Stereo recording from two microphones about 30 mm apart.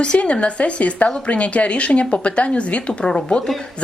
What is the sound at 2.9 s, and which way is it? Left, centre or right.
Speech, left.